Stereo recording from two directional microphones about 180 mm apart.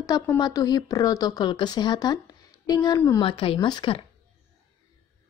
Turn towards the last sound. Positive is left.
turn(degrees=25)  # may be behind; listen again after turning